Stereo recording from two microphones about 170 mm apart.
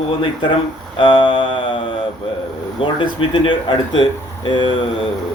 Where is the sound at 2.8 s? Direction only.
30° left (ahead or behind).